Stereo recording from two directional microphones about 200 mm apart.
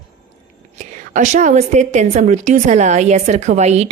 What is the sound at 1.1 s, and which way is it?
A woman's voice, 40° right (ahead or behind).